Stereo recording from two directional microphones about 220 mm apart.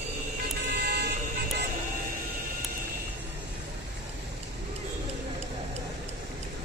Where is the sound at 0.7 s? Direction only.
45° right (ahead or behind).